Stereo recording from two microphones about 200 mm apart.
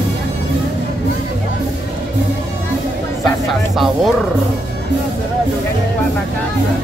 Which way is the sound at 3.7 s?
Centre (ahead or behind).